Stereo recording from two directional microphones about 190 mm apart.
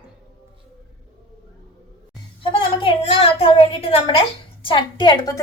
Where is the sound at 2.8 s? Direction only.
30° left (ahead or behind).